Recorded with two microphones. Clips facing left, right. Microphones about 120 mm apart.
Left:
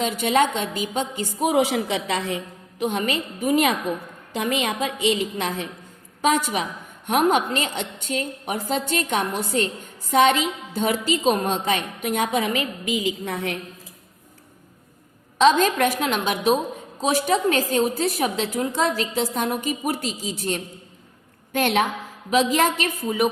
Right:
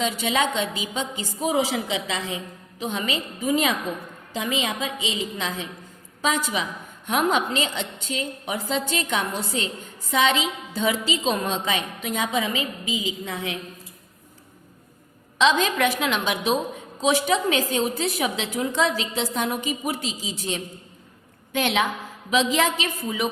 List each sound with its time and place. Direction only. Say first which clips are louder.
0.2 s a woman's voice: left 3 dB; 50° left (ahead or behind)
15.4 s a woman's voice: left 3 dB; 45° left (ahead or behind)